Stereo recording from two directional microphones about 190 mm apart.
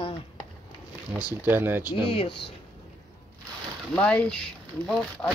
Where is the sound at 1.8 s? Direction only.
25° left (ahead or behind).